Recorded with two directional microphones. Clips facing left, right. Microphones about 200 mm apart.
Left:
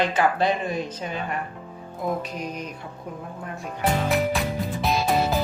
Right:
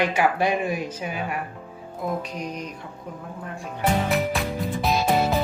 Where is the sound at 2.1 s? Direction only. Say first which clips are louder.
Left 1 dB; 5° left (ahead or behind).